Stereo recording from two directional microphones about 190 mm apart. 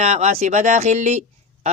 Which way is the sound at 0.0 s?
35° right (ahead or behind).